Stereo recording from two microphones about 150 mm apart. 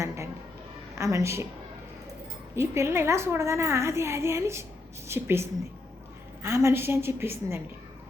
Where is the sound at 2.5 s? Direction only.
20° right (ahead or behind).